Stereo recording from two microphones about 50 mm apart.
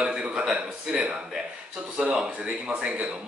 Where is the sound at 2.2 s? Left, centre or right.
Right.